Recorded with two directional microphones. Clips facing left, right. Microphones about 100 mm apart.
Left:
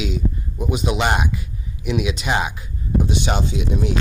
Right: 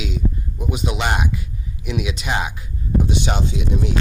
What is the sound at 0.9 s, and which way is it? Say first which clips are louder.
Speech: left 3 dB; 35° left (ahead or behind).